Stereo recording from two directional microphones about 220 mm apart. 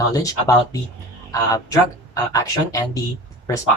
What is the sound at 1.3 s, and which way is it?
Speech, 15° left (ahead or behind).